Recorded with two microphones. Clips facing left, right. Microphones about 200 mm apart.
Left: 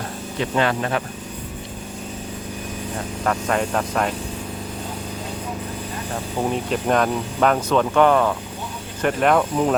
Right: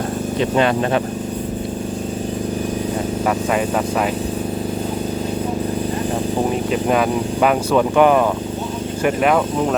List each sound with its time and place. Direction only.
0.5 s speech: 20° right (ahead or behind)
3.2 s speech: 5° right (ahead or behind)
6.7 s speech: 5° right (ahead or behind)